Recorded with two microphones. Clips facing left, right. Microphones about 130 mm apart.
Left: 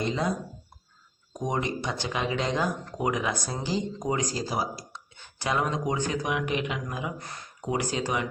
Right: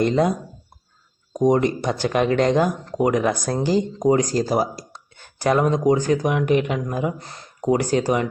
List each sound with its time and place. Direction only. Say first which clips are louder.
0.0 s speech: right 10 dB; 55° right (ahead or behind)
1.4 s speech: right 11 dB; 40° right (ahead or behind); by 2.6 s 60° right (ahead or behind)
3.0 s speech: right 9 dB; 45° right (ahead or behind)
7.6 s speech: right 9 dB; 45° right (ahead or behind)